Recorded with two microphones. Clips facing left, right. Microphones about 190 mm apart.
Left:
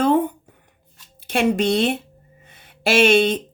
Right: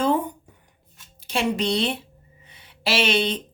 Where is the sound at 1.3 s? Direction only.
50° left (ahead or behind).